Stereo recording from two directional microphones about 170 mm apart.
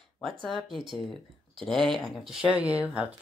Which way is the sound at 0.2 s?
Centre (ahead or behind).